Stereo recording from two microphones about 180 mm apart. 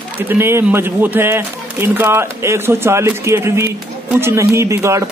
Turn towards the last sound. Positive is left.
turn(degrees=-15)  # may be behind; listen again after turning